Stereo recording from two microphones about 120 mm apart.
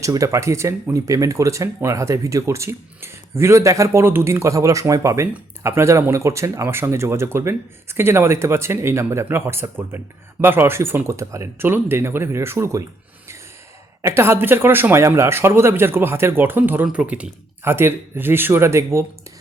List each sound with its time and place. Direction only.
0.0 s speech: 30° right (ahead or behind)
14.0 s speech: 20° right (ahead or behind)